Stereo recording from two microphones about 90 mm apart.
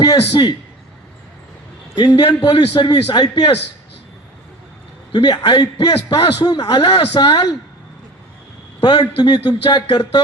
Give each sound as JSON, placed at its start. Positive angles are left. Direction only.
{"t": 0.0, "sound": "a man's voice", "side_deg": 50}
{"t": 2.1, "sound": "speech", "side_deg": 50}
{"t": 5.1, "sound": "speech", "side_deg": 50}
{"t": 8.8, "sound": "a man's voice", "side_deg": 55}